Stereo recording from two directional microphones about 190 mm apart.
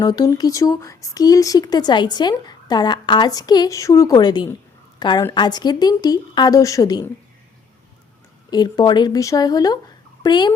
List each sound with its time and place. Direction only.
0.0 s speech: 20° left (ahead or behind)
8.4 s speech: 20° left (ahead or behind)